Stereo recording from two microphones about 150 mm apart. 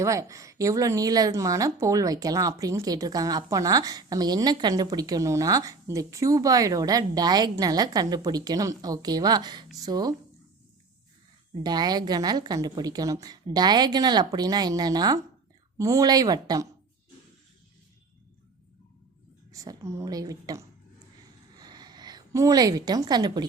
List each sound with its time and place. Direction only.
0.0 s a woman's voice: 20° right (ahead or behind)
11.6 s a woman's voice: 30° right (ahead or behind)
19.5 s a woman's voice: 20° right (ahead or behind)
21.5 s a sound: 25° right (ahead or behind)